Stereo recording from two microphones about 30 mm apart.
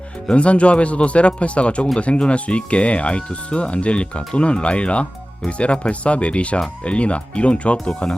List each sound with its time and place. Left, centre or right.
0.3 s speech: left